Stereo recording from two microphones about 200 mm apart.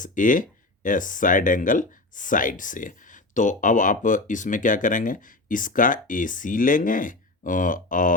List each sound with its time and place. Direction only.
0.0 s speech: 40° left (ahead or behind)